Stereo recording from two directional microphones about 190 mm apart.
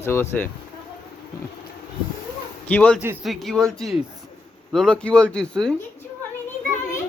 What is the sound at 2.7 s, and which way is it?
Speech, 5° left (ahead or behind).